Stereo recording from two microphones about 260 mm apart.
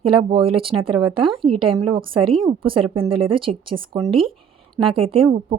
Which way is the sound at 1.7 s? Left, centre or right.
Right.